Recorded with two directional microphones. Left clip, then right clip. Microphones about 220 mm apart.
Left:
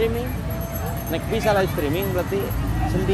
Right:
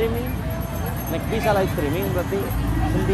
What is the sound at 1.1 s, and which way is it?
Speech, 15° left (ahead or behind).